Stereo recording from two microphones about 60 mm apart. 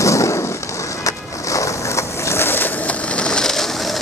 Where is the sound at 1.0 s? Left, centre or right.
Left.